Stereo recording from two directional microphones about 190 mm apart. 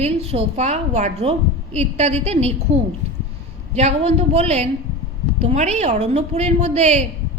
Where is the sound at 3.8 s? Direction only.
35° right (ahead or behind).